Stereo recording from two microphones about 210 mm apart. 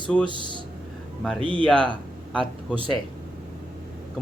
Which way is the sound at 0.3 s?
25° right (ahead or behind).